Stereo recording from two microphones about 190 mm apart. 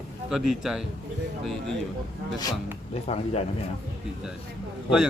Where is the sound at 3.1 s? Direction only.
30° left (ahead or behind).